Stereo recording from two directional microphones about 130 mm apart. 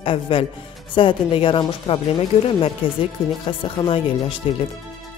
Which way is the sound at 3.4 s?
45° left (ahead or behind).